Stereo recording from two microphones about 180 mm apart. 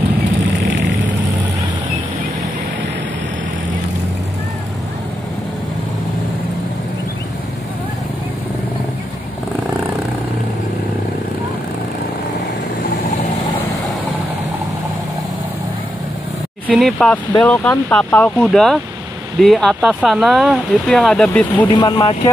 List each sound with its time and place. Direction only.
0.7 s vehicle: 85° right
16.6 s speech: centre (ahead or behind)
21.6 s speech: 25° left (ahead or behind)